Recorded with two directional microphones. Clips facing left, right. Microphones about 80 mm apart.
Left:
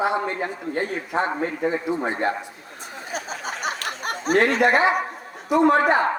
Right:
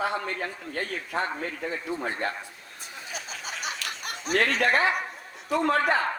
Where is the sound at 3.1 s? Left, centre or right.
Left.